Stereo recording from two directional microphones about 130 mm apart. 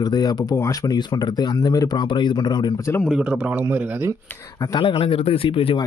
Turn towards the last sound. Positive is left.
turn(degrees=40)  # may be behind; listen again after turning